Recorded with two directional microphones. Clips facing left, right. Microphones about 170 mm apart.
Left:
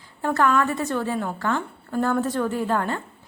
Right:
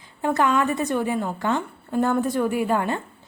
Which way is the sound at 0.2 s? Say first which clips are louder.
Even; 15° right (ahead or behind).